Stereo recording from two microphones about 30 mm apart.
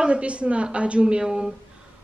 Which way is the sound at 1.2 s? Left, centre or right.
Centre.